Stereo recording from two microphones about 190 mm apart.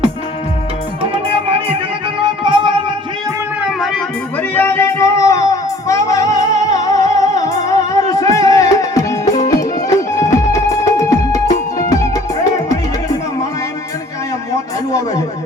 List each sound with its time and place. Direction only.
1.1 s music: 30° right (ahead or behind)
3.7 s music: centre (ahead or behind)
4.5 s music: 15° left (ahead or behind)